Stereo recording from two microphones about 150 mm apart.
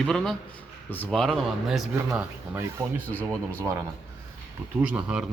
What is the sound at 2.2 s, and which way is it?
Speech, 15° right (ahead or behind).